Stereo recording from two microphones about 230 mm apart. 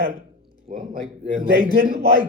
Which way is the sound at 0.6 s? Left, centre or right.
Right.